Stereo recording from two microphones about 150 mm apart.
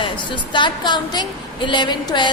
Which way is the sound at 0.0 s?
30° left (ahead or behind).